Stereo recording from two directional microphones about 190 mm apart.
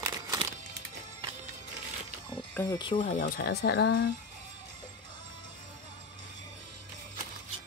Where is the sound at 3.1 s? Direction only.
50° left (ahead or behind).